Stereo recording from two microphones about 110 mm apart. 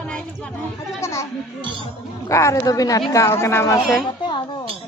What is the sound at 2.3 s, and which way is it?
Speech, 25° left (ahead or behind).